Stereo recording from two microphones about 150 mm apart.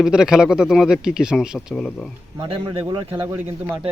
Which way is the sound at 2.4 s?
35° right (ahead or behind).